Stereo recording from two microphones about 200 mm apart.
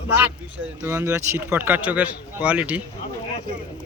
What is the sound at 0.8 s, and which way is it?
Speech, 10° right (ahead or behind).